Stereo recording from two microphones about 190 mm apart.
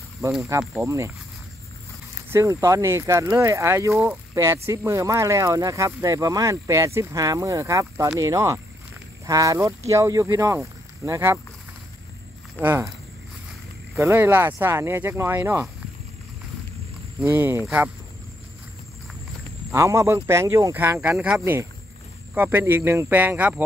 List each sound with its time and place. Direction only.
0.2 s speech: 20° right (ahead or behind)
2.3 s speech: 15° right (ahead or behind)
12.5 s speech: 10° right (ahead or behind)
13.9 s speech: 15° right (ahead or behind)
17.2 s speech: 10° right (ahead or behind)
19.7 s speech: 15° right (ahead or behind)